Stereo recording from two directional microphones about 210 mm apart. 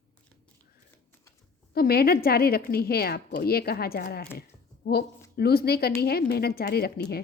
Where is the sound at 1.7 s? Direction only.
45° left (ahead or behind).